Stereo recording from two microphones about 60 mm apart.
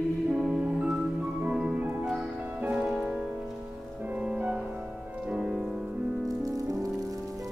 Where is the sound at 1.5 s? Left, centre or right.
Centre.